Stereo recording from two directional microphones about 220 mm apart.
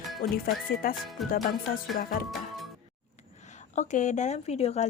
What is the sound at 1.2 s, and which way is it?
Music, centre (ahead or behind).